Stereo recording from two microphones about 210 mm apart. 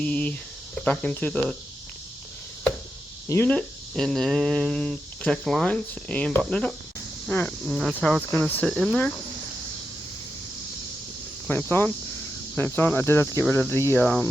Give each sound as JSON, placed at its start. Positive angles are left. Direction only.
{"t": 0.0, "sound": "speech", "side_deg": 5}
{"t": 3.2, "sound": "speech", "side_deg": 10}
{"t": 11.4, "sound": "cricket", "side_deg": 10}